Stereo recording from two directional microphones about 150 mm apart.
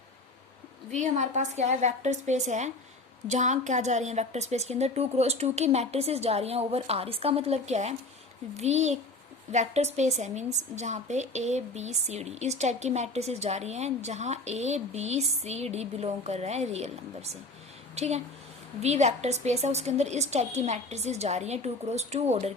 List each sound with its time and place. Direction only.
0.9 s a woman's voice: 55° right (ahead or behind)